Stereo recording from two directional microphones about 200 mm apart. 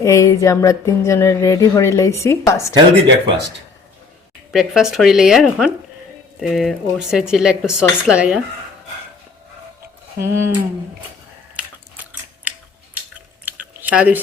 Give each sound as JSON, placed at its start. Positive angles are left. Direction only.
{"t": 0.0, "sound": "speech", "side_deg": 15}
{"t": 4.5, "sound": "speech", "side_deg": 0}
{"t": 10.2, "sound": "speech", "side_deg": -15}
{"t": 12.5, "sound": "a sound", "side_deg": -5}
{"t": 13.4, "sound": "chewing", "side_deg": -5}